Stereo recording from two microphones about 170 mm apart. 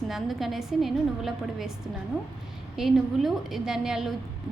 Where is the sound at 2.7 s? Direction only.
Centre (ahead or behind).